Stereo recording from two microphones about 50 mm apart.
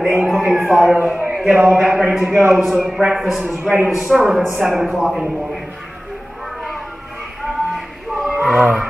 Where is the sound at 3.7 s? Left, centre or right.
Centre.